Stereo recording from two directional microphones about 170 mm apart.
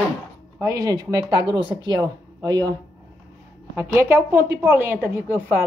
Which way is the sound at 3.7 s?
15° right (ahead or behind).